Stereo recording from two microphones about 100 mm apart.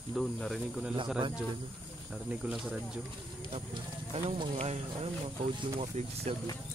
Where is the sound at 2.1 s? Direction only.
5° right (ahead or behind).